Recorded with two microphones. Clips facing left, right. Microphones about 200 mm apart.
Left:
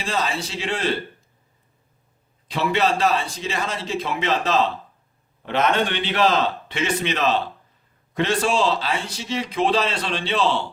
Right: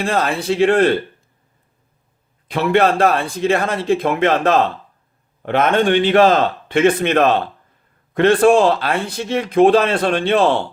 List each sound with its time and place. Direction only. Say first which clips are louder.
0.0 s speech: right 7 dB; 55° right (ahead or behind)
2.5 s a man's voice: right 6 dB; 55° right (ahead or behind)